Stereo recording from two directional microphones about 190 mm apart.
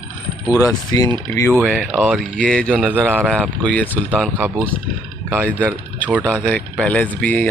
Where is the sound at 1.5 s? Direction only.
5° right (ahead or behind).